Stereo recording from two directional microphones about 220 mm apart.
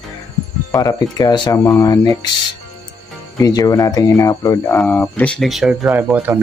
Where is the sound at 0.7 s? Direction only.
15° left (ahead or behind).